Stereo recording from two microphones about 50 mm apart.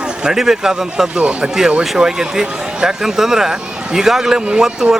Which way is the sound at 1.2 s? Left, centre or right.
Right.